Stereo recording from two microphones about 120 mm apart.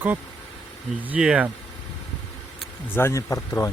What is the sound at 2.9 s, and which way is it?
Speech, 20° left (ahead or behind).